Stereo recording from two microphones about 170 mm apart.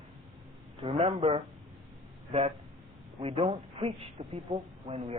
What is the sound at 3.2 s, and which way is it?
A woman's voice, 35° right (ahead or behind).